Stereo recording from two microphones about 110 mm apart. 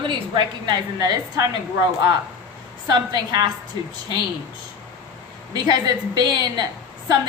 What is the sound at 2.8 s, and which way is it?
Speech, 40° right (ahead or behind).